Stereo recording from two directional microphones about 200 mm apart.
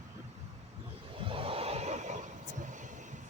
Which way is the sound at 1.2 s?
25° right (ahead or behind).